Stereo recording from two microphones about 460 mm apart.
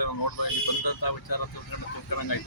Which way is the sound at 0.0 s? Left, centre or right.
Left.